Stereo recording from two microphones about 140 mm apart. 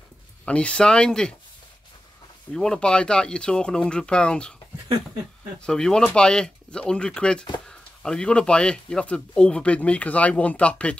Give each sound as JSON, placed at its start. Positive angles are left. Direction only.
{"t": 0.5, "sound": "speech", "side_deg": 10}
{"t": 2.5, "sound": "speech", "side_deg": 5}
{"t": 5.6, "sound": "speech", "side_deg": 5}